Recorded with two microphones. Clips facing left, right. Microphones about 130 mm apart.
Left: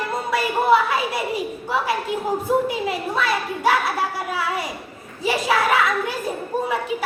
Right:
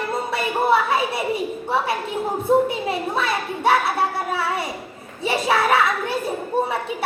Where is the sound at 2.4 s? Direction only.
25° right (ahead or behind).